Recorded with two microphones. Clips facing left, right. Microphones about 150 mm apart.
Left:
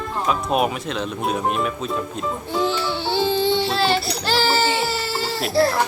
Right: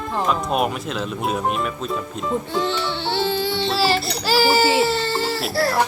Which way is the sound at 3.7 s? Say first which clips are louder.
Even; centre (ahead or behind).